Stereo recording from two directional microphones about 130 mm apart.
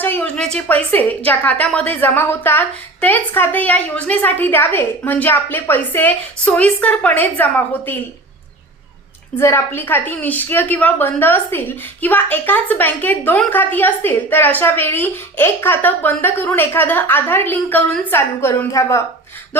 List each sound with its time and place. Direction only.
0.0 s a woman's voice: 15° left (ahead or behind)
9.4 s a woman's voice: 20° left (ahead or behind)